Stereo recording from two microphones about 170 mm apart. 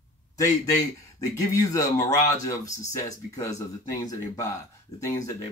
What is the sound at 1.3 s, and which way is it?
Speech, 20° left (ahead or behind).